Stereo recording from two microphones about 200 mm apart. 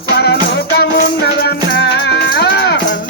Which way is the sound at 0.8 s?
55° left (ahead or behind).